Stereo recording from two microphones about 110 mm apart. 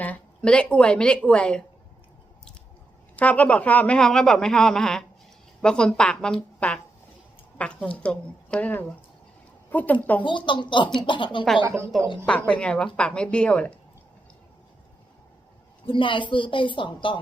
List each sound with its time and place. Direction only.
0.0 s a woman's voice: 10° left (ahead or behind)
3.2 s a woman's voice: 15° left (ahead or behind)
10.2 s a woman's voice: 45° left (ahead or behind)
11.6 s speech: 25° right (ahead or behind)
12.5 s a woman's voice: 10° left (ahead or behind)
15.9 s a woman's voice: 50° left (ahead or behind)